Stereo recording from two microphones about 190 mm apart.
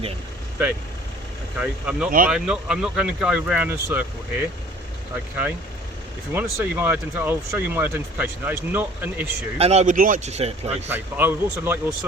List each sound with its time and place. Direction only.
1.5 s speech: 5° right (ahead or behind)
6.3 s speech: 10° right (ahead or behind)
9.6 s speech: 35° right (ahead or behind)
10.9 s speech: 10° right (ahead or behind)